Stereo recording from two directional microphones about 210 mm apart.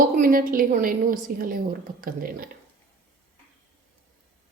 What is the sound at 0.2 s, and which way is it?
A woman's voice, 40° right (ahead or behind).